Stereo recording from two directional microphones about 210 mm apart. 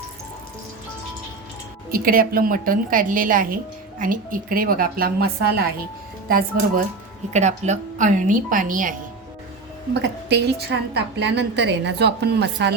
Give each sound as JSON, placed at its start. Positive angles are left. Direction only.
{"t": 1.9, "sound": "a woman's voice", "side_deg": -45}
{"t": 7.3, "sound": "speech", "side_deg": -35}
{"t": 9.9, "sound": "a woman's voice", "side_deg": -50}